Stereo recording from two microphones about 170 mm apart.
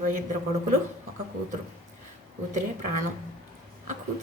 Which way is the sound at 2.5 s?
45° right (ahead or behind).